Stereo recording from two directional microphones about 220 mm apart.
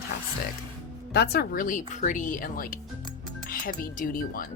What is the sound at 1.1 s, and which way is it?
Speech, 45° left (ahead or behind).